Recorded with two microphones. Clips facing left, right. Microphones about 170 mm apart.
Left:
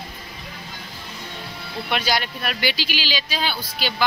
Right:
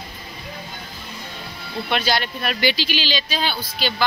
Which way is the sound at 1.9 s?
10° left (ahead or behind).